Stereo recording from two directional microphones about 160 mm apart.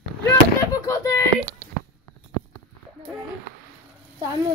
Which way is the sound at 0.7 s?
20° left (ahead or behind).